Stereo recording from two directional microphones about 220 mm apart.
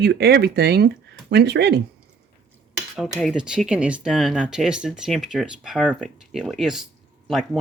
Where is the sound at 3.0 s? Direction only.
Centre (ahead or behind).